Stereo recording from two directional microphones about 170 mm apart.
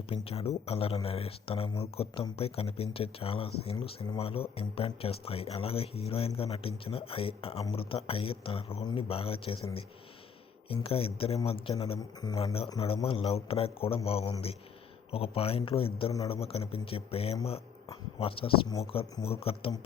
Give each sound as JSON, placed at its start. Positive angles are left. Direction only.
{"t": 0.1, "sound": "speech", "side_deg": 35}
{"t": 10.8, "sound": "speech", "side_deg": 35}
{"t": 12.2, "sound": "speech", "side_deg": 25}
{"t": 12.8, "sound": "speech", "side_deg": 35}